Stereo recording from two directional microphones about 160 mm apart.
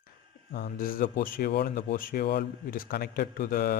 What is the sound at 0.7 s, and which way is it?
Speech, 65° left (ahead or behind).